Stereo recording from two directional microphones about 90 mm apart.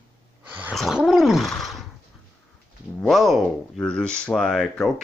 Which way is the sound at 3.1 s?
Centre (ahead or behind).